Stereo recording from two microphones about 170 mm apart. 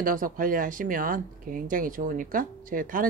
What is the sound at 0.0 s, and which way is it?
Speech, 55° right (ahead or behind).